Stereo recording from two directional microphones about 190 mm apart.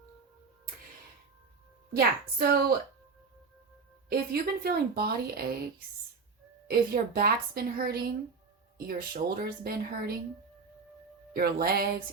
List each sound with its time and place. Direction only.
1.9 s a woman's voice: 50° right (ahead or behind)
4.1 s a woman's voice: 55° right (ahead or behind)
6.7 s a woman's voice: 50° right (ahead or behind)
11.3 s a woman's voice: 50° right (ahead or behind)